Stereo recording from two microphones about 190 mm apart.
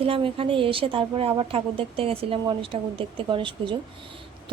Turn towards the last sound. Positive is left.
turn(degrees=-25)  # may be behind; listen again after turning